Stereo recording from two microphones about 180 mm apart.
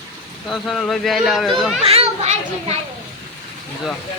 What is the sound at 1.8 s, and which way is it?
Children playing, 35° right (ahead or behind).